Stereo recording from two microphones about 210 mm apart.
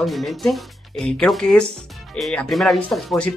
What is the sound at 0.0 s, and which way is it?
Speech, centre (ahead or behind).